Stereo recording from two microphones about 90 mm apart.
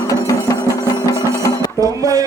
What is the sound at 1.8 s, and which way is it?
Music, 35° right (ahead or behind).